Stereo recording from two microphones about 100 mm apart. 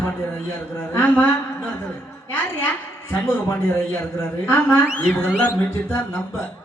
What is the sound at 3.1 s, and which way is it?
Speech, 25° left (ahead or behind).